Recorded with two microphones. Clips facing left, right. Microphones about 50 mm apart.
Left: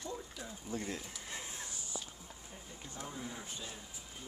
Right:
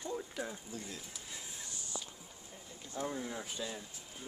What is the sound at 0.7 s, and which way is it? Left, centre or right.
Speech, left.